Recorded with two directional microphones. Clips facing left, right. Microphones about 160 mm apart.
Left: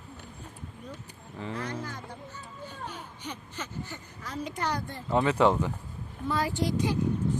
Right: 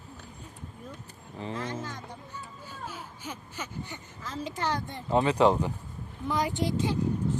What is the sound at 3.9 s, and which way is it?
Speech, 25° right (ahead or behind).